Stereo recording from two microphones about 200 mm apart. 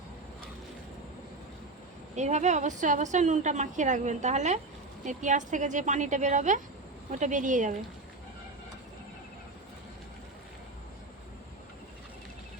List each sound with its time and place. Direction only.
2.1 s a woman's voice: 35° right (ahead or behind)